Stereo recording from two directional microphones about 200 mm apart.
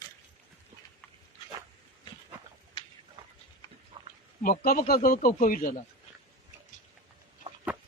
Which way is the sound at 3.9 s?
20° right (ahead or behind).